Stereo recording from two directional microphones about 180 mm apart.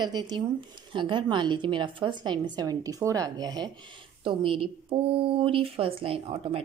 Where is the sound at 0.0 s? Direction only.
25° right (ahead or behind).